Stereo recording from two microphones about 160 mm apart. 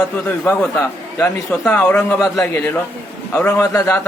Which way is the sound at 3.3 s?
15° left (ahead or behind).